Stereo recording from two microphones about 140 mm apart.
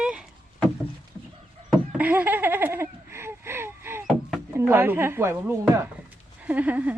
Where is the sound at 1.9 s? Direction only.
10° right (ahead or behind).